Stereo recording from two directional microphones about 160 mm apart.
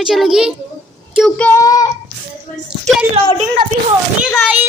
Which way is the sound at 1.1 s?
5° left (ahead or behind).